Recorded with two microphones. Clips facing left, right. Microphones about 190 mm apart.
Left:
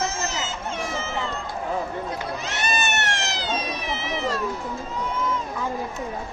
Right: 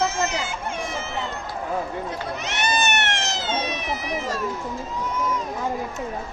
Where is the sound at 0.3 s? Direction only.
15° right (ahead or behind).